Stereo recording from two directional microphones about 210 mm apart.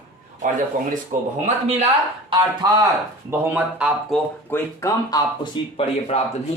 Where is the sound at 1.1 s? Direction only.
35° right (ahead or behind).